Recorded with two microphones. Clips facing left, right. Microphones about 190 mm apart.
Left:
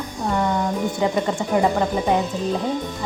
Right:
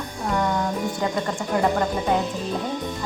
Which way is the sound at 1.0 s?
20° left (ahead or behind).